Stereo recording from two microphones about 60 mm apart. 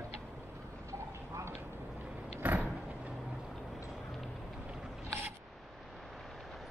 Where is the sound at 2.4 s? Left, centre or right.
Right.